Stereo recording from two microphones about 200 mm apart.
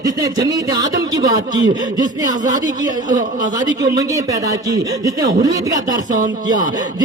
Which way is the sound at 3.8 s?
15° right (ahead or behind).